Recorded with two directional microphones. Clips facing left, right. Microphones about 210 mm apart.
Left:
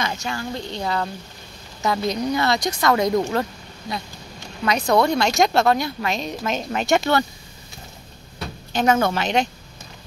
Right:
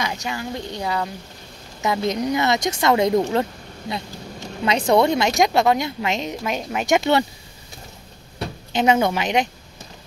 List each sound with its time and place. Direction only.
0.0 s speech: 15° right (ahead or behind)
1.8 s a woman's voice: 20° right (ahead or behind)
4.6 s a woman's voice: 25° right (ahead or behind); by 7.0 s 10° right (ahead or behind)
8.7 s speech: 15° right (ahead or behind)